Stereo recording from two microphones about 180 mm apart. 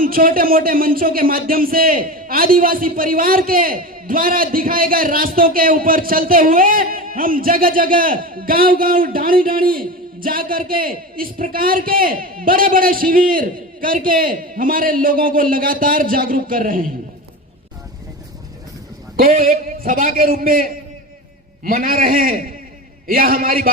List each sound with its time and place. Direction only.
0.0 s speech: 50° right (ahead or behind)
19.1 s speech: 55° right (ahead or behind)